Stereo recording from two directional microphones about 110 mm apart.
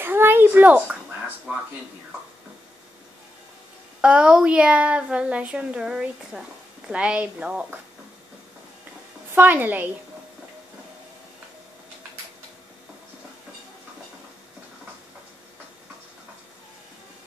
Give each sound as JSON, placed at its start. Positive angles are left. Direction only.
{"t": 0.0, "sound": "a sound", "side_deg": -20}
{"t": 4.0, "sound": "speech", "side_deg": -10}
{"t": 9.3, "sound": "speech", "side_deg": -15}